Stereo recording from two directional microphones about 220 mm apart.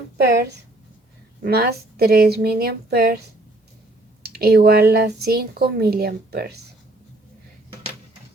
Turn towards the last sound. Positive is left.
turn(degrees=-45)  # may be behind; listen again after turning